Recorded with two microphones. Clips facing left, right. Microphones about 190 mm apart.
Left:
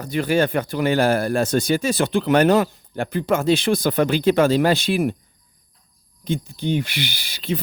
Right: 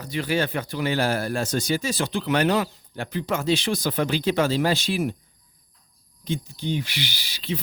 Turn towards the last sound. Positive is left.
turn(degrees=55)  # may be behind; listen again after turning